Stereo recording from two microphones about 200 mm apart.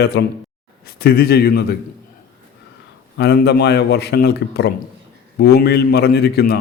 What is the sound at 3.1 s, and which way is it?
A man's voice, 55° left (ahead or behind).